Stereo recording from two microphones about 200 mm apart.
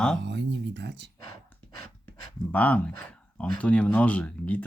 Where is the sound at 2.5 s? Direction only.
5° left (ahead or behind).